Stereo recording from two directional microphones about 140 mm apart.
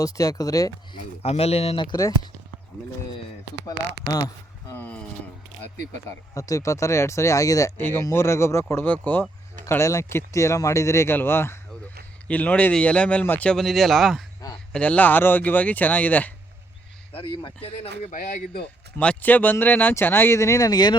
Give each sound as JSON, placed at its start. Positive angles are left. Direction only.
{"t": 0.0, "sound": "speech", "side_deg": 25}
{"t": 1.2, "sound": "speech", "side_deg": 45}
{"t": 2.0, "sound": "speech", "side_deg": 25}
{"t": 3.7, "sound": "speech", "side_deg": 25}
{"t": 4.7, "sound": "speech", "side_deg": 10}
{"t": 6.3, "sound": "speech", "side_deg": 25}
{"t": 18.0, "sound": "speech", "side_deg": 60}
{"t": 18.9, "sound": "speech", "side_deg": 10}